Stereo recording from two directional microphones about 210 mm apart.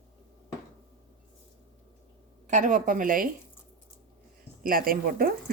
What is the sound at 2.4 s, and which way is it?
Speech, 40° right (ahead or behind).